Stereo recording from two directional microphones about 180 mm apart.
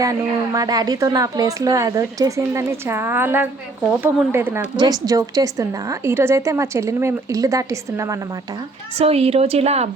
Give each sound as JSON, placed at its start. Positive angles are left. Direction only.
{"t": 0.0, "sound": "a woman's voice", "side_deg": -20}
{"t": 9.0, "sound": "a woman's voice", "side_deg": -35}